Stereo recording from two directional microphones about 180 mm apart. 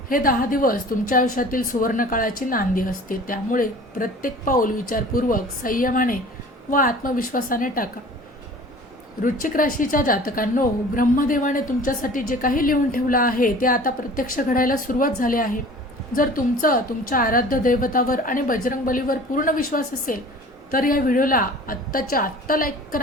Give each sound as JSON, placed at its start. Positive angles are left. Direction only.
{"t": 0.1, "sound": "a woman's voice", "side_deg": 50}
{"t": 9.2, "sound": "a woman's voice", "side_deg": 50}